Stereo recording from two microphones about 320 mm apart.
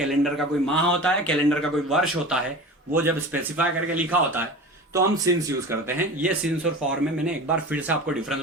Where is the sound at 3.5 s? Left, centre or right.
Centre.